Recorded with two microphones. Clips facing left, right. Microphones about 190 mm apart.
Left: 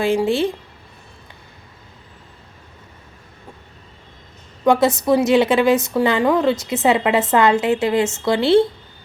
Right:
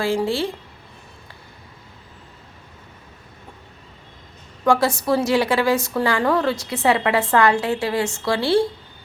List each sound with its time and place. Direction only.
0.0 s a woman's voice: 20° left (ahead or behind)
4.6 s a woman's voice: 20° left (ahead or behind)